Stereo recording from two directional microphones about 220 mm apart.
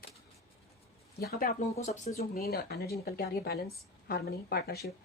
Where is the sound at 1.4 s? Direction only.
35° left (ahead or behind).